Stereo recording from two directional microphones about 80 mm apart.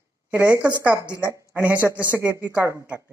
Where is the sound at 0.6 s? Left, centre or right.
Centre.